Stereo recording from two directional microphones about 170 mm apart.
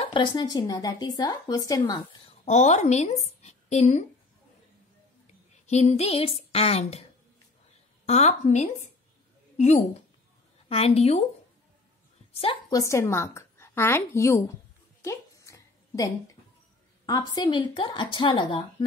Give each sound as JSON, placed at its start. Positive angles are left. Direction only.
{"t": 0.0, "sound": "speech", "side_deg": 25}
{"t": 2.2, "sound": "a woman's voice", "side_deg": 40}
{"t": 5.7, "sound": "a woman's voice", "side_deg": 40}
{"t": 8.1, "sound": "a woman's voice", "side_deg": 40}
{"t": 12.4, "sound": "a woman's voice", "side_deg": 25}
{"t": 15.0, "sound": "a sound", "side_deg": 15}
{"t": 17.0, "sound": "speech", "side_deg": 20}